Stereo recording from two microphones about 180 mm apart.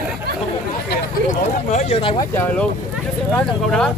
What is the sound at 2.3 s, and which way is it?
Speech, 10° left (ahead or behind).